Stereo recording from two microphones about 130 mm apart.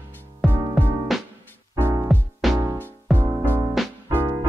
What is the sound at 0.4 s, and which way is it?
Music, centre (ahead or behind).